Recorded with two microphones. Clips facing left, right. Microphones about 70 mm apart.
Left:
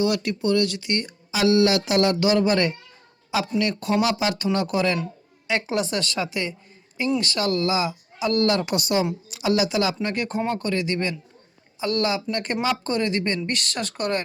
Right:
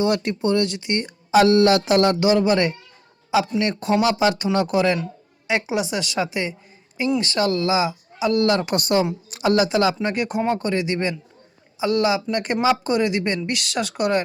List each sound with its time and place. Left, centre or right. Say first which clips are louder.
0.0 s speech: right 2 dB; right
1.3 s a woman's voice: right 4 dB; right
8.6 s a woman's voice: right 3 dB; right; by 14.2 s centre